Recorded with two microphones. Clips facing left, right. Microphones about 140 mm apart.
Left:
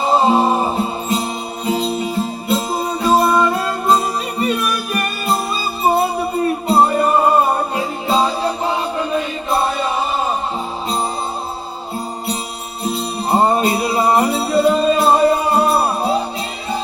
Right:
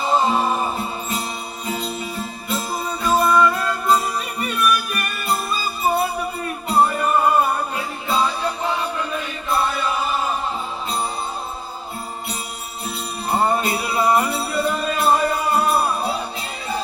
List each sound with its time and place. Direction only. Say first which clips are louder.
0.0 s music: left 5 dB; 30° left (ahead or behind)
12.8 s jingle bell: left 8 dB; 30° left (ahead or behind)